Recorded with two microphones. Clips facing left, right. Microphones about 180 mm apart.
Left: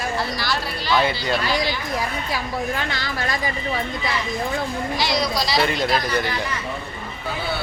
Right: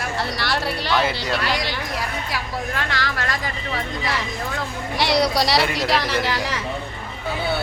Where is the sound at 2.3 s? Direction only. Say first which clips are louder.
Left 2 dB; 80° right.